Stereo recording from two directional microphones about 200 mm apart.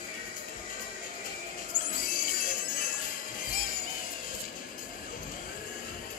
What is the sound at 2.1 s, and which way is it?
Jingle bell, 45° left (ahead or behind).